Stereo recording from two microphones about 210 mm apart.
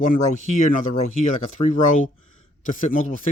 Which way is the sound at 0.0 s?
35° left (ahead or behind).